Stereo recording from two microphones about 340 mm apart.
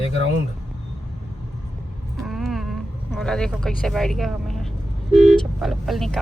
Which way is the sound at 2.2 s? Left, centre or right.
Centre.